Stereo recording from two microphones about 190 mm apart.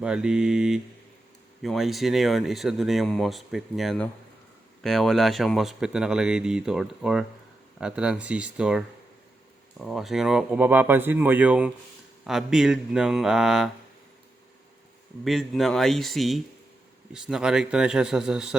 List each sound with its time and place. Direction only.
0.0 s speech: 5° right (ahead or behind)
15.2 s speech: centre (ahead or behind)